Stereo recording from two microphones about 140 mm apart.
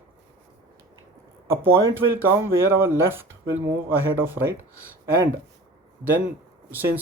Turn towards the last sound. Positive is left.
turn(degrees=-15)  # may be behind; listen again after turning